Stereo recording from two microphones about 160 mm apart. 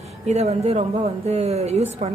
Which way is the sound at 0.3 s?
40° right (ahead or behind).